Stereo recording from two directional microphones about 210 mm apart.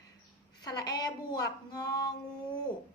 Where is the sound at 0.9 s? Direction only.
20° left (ahead or behind).